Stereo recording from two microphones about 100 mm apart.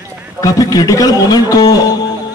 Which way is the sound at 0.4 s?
35° left (ahead or behind).